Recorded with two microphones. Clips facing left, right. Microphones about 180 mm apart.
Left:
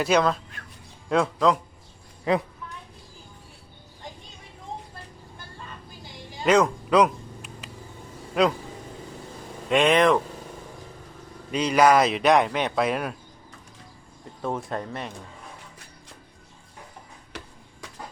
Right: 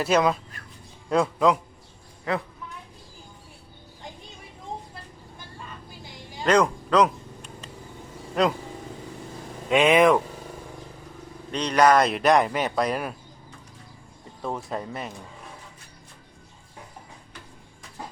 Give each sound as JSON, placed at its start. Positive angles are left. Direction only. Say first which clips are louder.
{"t": 0.0, "sound": "speech", "louder": "even", "side_deg": -5}
{"t": 2.3, "sound": "a woman's voice", "louder": "left 4 dB", "side_deg": 20}
{"t": 6.4, "sound": "speech", "louder": "left 1 dB", "side_deg": 5}
{"t": 9.6, "sound": "speech", "louder": "right 1 dB", "side_deg": -5}
{"t": 11.5, "sound": "speech", "louder": "even", "side_deg": 5}
{"t": 14.4, "sound": "speech", "louder": "left 1 dB", "side_deg": 0}
{"t": 17.3, "sound": "a sound", "louder": "left 5 dB", "side_deg": 85}